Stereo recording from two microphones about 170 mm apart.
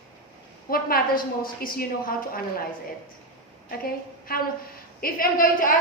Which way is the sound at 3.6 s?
60° left (ahead or behind).